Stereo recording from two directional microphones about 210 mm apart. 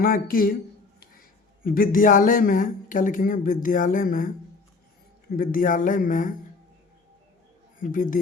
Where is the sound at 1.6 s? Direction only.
45° left (ahead or behind).